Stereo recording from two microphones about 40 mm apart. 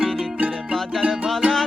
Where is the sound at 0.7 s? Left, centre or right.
Centre.